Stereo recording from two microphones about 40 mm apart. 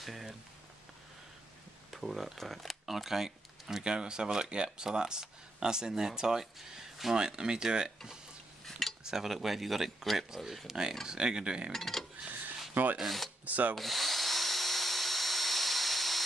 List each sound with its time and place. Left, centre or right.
0.0 s speech: centre
1.9 s speech: centre
3.8 s speech: right
9.0 s speech: centre
11.7 s speech: centre
13.5 s drill: right
13.7 s drill: centre